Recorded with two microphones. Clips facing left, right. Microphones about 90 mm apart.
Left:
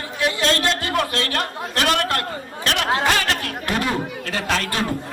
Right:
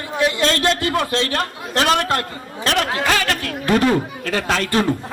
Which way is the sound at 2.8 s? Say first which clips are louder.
Even; 30° left (ahead or behind).